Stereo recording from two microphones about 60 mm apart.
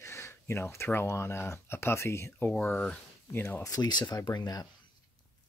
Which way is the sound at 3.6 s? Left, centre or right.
Left.